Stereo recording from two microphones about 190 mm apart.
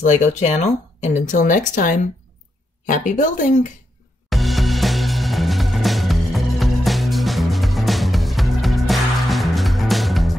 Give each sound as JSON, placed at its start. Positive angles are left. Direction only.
{"t": 0.0, "sound": "speech", "side_deg": 40}
{"t": 4.3, "sound": "music", "side_deg": 0}